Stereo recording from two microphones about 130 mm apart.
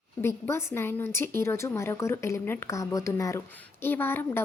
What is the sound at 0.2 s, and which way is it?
A woman's voice, 20° left (ahead or behind).